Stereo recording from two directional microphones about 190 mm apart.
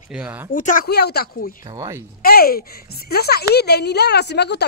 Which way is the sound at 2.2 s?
55° left (ahead or behind).